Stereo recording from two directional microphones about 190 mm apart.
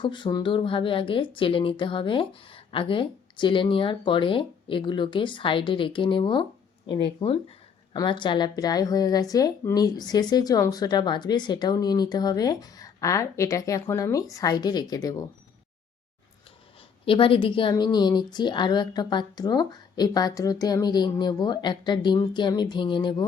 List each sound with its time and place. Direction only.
0.0 s a woman's voice: 25° left (ahead or behind)
17.1 s a woman's voice: 30° left (ahead or behind)